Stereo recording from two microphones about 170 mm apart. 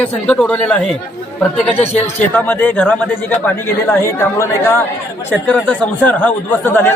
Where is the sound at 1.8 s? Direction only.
40° left (ahead or behind).